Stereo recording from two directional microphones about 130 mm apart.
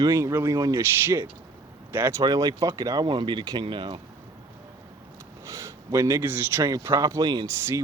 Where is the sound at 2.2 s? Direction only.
30° right (ahead or behind).